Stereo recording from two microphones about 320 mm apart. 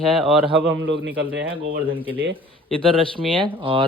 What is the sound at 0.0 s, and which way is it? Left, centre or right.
Speech, centre.